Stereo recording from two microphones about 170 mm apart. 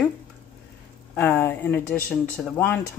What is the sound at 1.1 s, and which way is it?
Speech, 10° left (ahead or behind).